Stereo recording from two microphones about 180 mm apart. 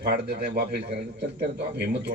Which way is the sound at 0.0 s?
60° right (ahead or behind).